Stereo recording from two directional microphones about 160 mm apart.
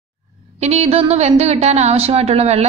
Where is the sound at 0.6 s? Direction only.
40° right (ahead or behind).